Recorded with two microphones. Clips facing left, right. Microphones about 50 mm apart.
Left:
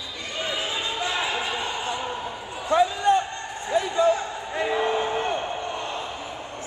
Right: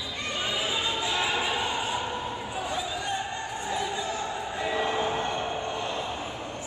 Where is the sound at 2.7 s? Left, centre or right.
Left.